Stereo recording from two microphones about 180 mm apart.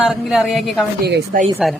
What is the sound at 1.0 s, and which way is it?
Speech, 65° right (ahead or behind).